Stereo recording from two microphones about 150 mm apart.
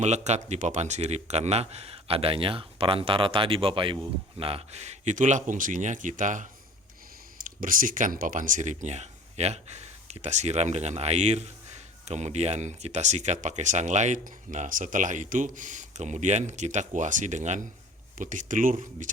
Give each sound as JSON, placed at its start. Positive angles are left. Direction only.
{"t": 0.0, "sound": "speech", "side_deg": -50}